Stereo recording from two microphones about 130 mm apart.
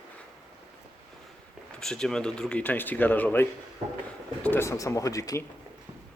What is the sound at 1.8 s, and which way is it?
Speech, 5° left (ahead or behind).